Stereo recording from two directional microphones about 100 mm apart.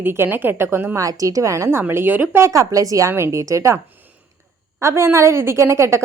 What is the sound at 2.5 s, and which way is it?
A woman's voice, 35° right (ahead or behind).